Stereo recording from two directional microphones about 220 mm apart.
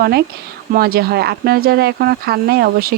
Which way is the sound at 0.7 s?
45° right (ahead or behind).